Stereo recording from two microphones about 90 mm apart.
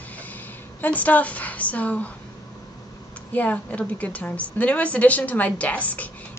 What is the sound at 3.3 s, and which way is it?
Speech, 15° left (ahead or behind).